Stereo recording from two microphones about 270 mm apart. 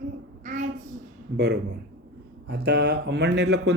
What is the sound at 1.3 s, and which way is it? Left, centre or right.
Speech, right.